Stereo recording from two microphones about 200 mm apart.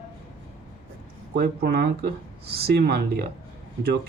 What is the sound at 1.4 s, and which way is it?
Speech, 55° right (ahead or behind).